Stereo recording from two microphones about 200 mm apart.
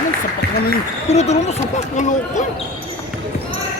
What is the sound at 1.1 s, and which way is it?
Speech, 35° left (ahead or behind).